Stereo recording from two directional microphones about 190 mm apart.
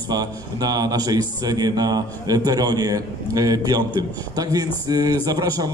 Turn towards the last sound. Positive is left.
turn(degrees=-20)  # may be behind; listen again after turning